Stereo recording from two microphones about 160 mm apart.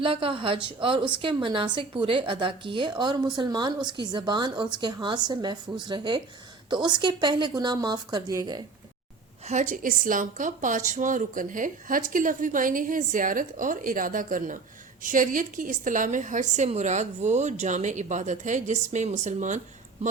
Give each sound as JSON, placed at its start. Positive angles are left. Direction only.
{"t": 0.0, "sound": "a woman's voice", "side_deg": -35}
{"t": 9.5, "sound": "a woman's voice", "side_deg": -50}